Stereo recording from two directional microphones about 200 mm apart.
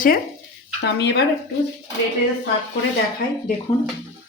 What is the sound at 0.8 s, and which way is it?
Speech, 55° left (ahead or behind).